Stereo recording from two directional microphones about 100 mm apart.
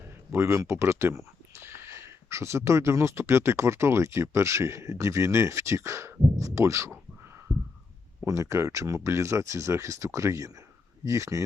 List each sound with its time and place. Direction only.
0.3 s speech: 30° right (ahead or behind)
8.2 s speech: 30° right (ahead or behind)